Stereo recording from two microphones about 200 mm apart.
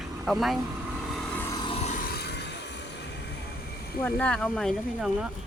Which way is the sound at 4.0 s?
10° left (ahead or behind).